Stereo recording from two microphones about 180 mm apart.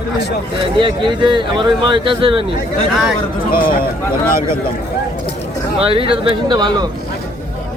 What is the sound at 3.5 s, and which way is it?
Speech, 55° left (ahead or behind).